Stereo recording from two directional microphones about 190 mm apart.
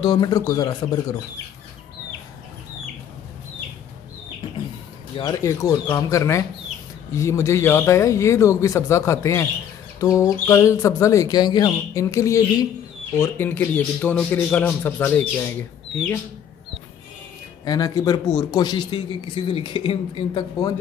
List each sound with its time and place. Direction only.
0.0 s a man's voice: 20° left (ahead or behind)
5.1 s speech: 15° left (ahead or behind)
17.6 s a man's voice: 20° left (ahead or behind)